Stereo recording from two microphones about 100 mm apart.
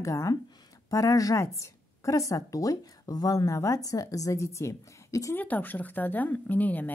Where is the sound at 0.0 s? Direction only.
30° left (ahead or behind).